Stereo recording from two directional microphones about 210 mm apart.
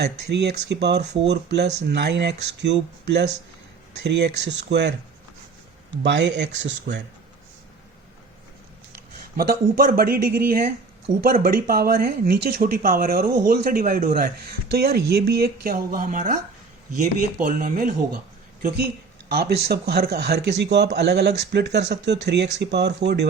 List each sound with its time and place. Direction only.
0.0 s speech: 50° right (ahead or behind)
6.0 s speech: 55° right (ahead or behind)
9.4 s speech: 45° right (ahead or behind)
17.4 s speech: 45° right (ahead or behind)
19.3 s speech: 50° right (ahead or behind)